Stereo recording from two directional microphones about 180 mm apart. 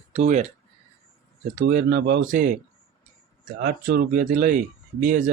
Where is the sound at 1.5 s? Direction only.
45° right (ahead or behind).